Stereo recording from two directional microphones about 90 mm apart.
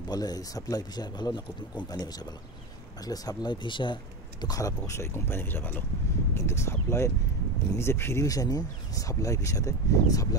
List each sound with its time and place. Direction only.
0.1 s speech: 45° left (ahead or behind)
4.8 s speech: 30° left (ahead or behind)